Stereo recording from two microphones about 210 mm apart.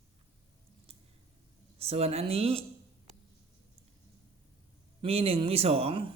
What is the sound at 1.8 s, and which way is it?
Speech, 30° right (ahead or behind).